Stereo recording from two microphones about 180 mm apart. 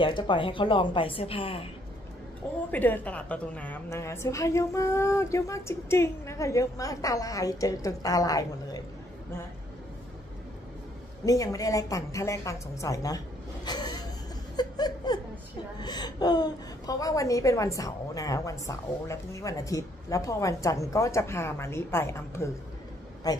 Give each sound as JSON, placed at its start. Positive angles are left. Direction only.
{"t": 0.0, "sound": "a woman's voice", "side_deg": 25}
{"t": 2.7, "sound": "a woman's voice", "side_deg": 10}
{"t": 11.2, "sound": "a woman's voice", "side_deg": 20}
{"t": 13.7, "sound": "vehicle", "side_deg": 25}
{"t": 14.6, "sound": "laughter", "side_deg": 25}
{"t": 15.8, "sound": "a woman's voice", "side_deg": 25}